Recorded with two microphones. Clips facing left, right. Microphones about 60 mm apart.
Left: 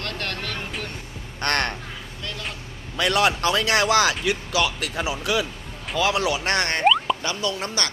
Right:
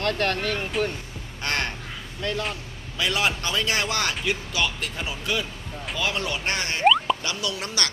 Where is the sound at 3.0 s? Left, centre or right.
Left.